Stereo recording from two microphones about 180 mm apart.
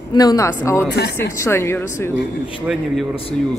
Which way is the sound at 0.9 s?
65° left (ahead or behind).